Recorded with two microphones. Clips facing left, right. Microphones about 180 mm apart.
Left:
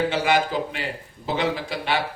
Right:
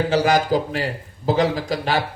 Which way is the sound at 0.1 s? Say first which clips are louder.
Right 4 dB; 40° right (ahead or behind).